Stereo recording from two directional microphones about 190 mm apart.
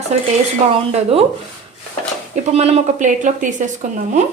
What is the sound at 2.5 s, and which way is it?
A woman's voice, 35° right (ahead or behind).